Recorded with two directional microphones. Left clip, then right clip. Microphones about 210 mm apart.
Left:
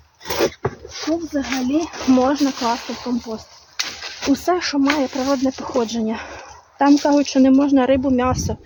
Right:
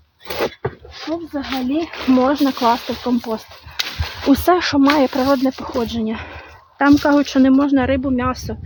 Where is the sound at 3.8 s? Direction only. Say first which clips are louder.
Right 2 dB; 50° right (ahead or behind).